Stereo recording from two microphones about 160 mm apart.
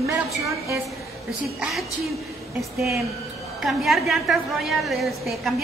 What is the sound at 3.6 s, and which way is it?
A woman's voice, centre (ahead or behind).